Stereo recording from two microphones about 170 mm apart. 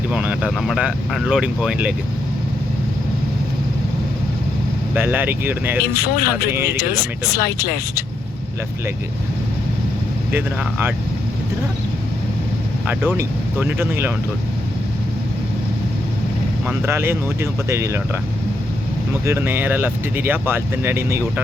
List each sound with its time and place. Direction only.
0.1 s speech: 10° right (ahead or behind)
4.9 s speech: 10° right (ahead or behind)
5.9 s speech: 65° left (ahead or behind)
6.5 s speech: 15° right (ahead or behind)
7.3 s speech: 60° left (ahead or behind)
10.3 s speech: 10° right (ahead or behind)
12.9 s speech: 15° right (ahead or behind)
16.6 s speech: 15° right (ahead or behind)
19.2 s speech: 15° right (ahead or behind)